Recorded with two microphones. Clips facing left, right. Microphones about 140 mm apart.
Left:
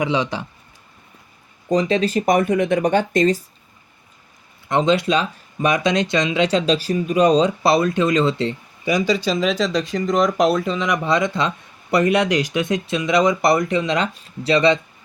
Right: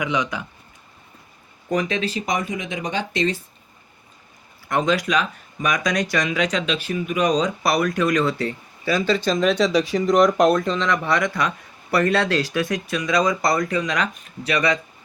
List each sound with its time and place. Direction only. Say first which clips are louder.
0.0 s speech: left 3 dB; 30° left (ahead or behind)
1.7 s speech: left 5 dB; 30° left (ahead or behind)
4.7 s speech: left 3 dB; 25° left (ahead or behind)